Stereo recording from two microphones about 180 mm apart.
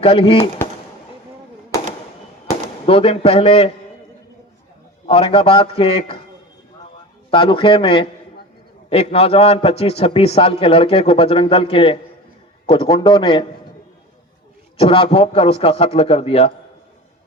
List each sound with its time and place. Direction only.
0.0 s a man's voice: 30° left (ahead or behind)
2.5 s speech: 30° left (ahead or behind)
5.0 s a man's voice: 30° left (ahead or behind)
7.3 s a man's voice: 30° left (ahead or behind)
14.8 s a man's voice: 30° left (ahead or behind)